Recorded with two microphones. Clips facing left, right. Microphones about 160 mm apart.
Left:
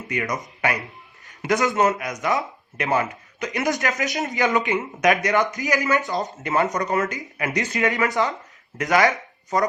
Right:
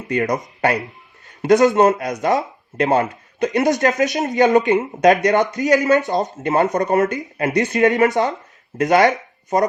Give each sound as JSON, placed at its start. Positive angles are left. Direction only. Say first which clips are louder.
{"t": 0.1, "sound": "speech", "louder": "right 8 dB", "side_deg": -30}